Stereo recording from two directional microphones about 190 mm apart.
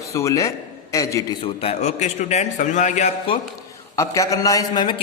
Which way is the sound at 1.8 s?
40° left (ahead or behind).